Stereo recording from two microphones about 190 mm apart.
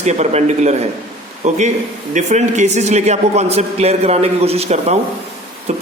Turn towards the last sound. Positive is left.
turn(degrees=-35)  # may be behind; listen again after turning